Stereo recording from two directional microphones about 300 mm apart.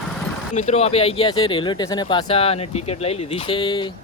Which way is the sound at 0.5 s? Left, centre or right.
Centre.